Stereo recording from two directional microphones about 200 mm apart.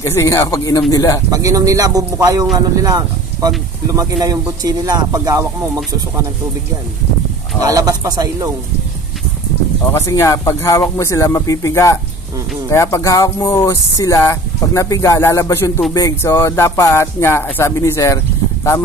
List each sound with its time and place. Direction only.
0.0 s speech: 15° left (ahead or behind)
1.3 s speech: 15° right (ahead or behind)
7.6 s speech: 15° right (ahead or behind)
9.9 s speech: 15° left (ahead or behind)